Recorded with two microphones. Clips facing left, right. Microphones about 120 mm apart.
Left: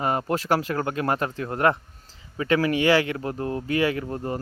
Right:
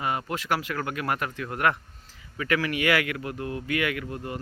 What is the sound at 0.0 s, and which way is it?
Speech, 40° left (ahead or behind).